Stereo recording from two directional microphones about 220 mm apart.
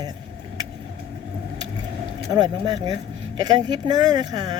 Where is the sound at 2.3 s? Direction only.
20° right (ahead or behind).